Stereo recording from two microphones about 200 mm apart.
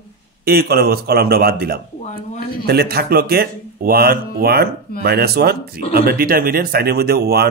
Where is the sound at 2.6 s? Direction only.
50° right (ahead or behind).